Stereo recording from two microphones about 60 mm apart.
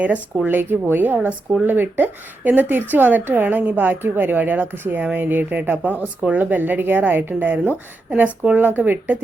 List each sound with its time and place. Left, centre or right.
0.4 s a woman's voice: right